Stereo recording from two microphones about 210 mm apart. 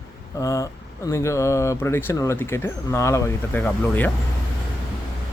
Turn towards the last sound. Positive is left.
turn(degrees=10)  # may be behind; listen again after turning